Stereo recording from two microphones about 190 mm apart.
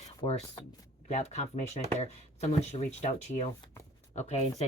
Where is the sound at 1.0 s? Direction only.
35° left (ahead or behind).